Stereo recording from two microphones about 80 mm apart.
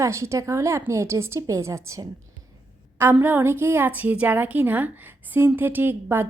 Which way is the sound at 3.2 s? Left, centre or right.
Right.